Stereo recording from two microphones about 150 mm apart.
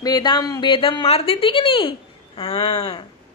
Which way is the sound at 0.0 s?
25° left (ahead or behind).